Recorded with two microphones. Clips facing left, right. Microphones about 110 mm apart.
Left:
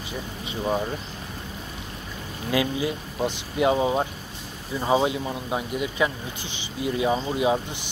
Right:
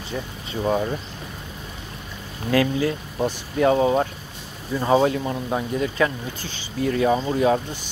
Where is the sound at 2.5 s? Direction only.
15° left (ahead or behind).